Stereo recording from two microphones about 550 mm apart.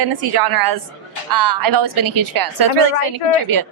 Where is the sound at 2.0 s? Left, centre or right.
Right.